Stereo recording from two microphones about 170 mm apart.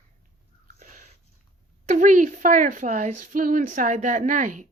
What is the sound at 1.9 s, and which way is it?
A woman's voice, 50° right (ahead or behind).